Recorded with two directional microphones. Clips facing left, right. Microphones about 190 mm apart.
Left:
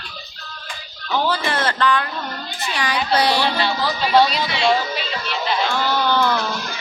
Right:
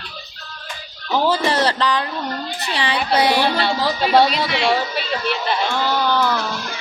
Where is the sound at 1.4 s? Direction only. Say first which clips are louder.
Right 2 dB; 35° right (ahead or behind); by 3.4 s 20° right (ahead or behind).